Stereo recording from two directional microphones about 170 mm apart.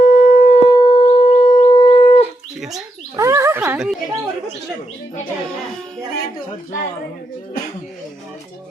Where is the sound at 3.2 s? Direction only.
20° right (ahead or behind).